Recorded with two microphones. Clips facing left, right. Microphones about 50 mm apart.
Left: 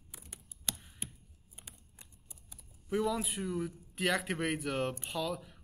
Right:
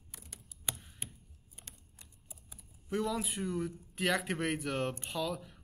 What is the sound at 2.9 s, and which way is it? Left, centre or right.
A man's voice, centre.